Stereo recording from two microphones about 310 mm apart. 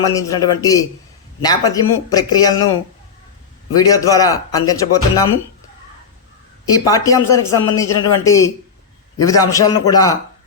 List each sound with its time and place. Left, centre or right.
0.0 s speech: centre
3.8 s speech: centre
6.7 s speech: centre